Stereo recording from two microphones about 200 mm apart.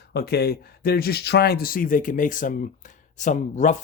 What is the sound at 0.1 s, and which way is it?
Speech, 50° left (ahead or behind).